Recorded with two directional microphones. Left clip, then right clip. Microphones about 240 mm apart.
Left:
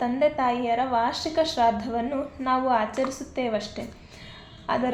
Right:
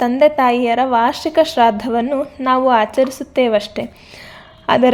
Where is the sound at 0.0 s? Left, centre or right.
Right.